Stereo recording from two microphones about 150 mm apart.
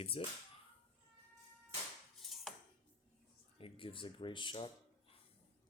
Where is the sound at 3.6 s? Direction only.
35° left (ahead or behind).